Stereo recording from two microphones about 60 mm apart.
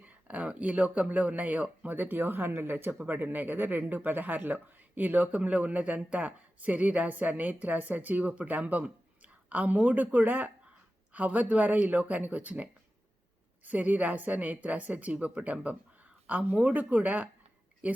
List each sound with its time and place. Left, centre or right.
0.0 s speech: right
13.7 s speech: right